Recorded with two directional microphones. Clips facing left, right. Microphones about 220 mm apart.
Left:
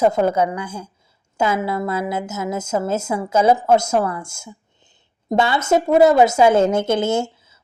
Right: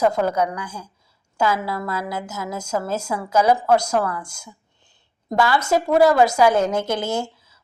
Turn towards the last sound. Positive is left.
turn(degrees=25)  # may be behind; listen again after turning